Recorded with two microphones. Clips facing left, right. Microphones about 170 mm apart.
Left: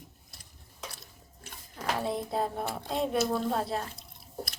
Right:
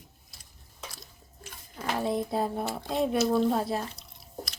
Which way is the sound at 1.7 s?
Centre (ahead or behind).